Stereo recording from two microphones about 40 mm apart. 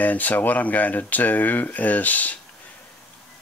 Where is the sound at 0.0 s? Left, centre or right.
Left.